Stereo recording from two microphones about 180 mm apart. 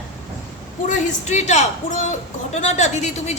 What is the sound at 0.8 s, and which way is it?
A woman's voice, 40° left (ahead or behind).